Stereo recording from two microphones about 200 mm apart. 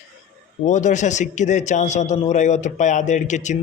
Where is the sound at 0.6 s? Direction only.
35° left (ahead or behind).